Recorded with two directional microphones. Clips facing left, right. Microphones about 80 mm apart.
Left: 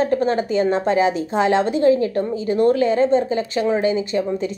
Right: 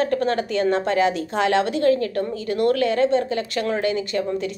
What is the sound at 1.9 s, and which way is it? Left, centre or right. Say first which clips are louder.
Speech: left 5 dB; centre.